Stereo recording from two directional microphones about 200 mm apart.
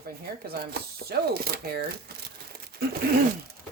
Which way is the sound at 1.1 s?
50° right (ahead or behind).